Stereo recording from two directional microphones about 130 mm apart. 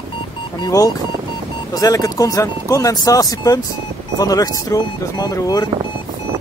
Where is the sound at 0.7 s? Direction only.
25° left (ahead or behind).